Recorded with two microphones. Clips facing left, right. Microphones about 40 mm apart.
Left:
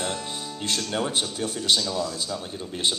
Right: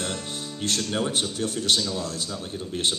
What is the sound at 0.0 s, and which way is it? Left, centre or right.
Music, left.